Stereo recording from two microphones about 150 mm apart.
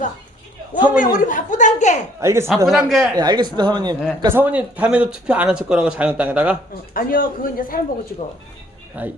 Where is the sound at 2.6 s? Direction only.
5° right (ahead or behind).